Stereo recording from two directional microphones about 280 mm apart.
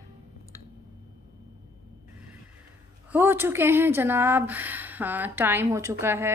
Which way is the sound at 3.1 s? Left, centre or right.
Centre.